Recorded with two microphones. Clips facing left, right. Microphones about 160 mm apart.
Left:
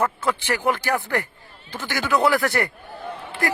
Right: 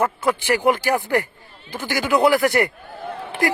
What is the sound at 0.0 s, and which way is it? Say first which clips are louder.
Speech: right 3 dB; 10° right (ahead or behind).